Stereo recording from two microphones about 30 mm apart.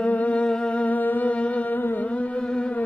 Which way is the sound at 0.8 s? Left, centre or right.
Left.